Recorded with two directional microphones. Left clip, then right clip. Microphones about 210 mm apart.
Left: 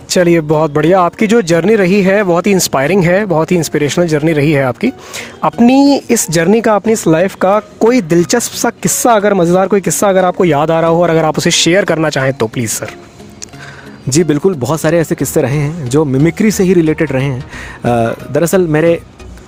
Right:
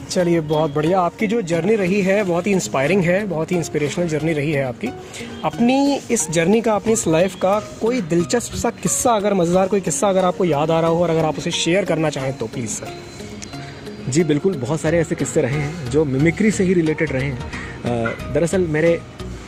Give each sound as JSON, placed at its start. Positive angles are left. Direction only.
{"t": 0.1, "sound": "speech", "side_deg": 50}
{"t": 14.2, "sound": "speech", "side_deg": 50}
{"t": 14.8, "sound": "speech", "side_deg": 45}